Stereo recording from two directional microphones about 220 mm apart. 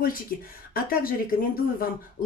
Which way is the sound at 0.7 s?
40° left (ahead or behind).